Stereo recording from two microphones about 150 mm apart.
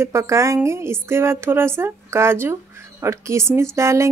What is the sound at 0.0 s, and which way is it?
Speech, 20° right (ahead or behind).